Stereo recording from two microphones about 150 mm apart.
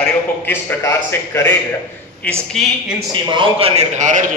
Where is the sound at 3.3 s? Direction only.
40° right (ahead or behind); by 4.3 s 55° right (ahead or behind).